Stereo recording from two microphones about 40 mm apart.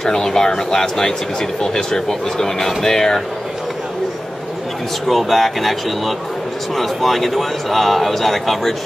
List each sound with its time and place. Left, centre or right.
0.0 s speech: centre
5.0 s speech: centre